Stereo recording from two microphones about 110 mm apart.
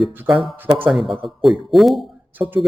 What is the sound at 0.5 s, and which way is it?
Speech, 15° right (ahead or behind).